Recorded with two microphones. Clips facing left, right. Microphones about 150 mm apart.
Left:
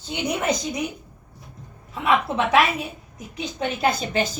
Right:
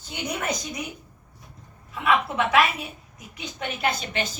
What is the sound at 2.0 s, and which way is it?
A woman's voice, 25° left (ahead or behind).